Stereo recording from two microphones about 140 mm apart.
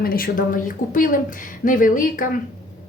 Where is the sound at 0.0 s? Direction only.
90° left.